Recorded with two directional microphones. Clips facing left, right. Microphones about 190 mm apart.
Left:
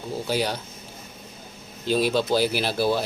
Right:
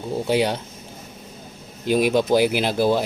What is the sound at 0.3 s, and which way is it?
Speech, 20° right (ahead or behind).